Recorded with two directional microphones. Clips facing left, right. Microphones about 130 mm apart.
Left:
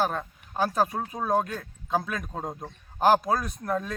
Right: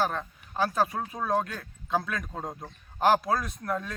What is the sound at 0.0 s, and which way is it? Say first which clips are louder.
A man's voice: left 1 dB; 10° left (ahead or behind).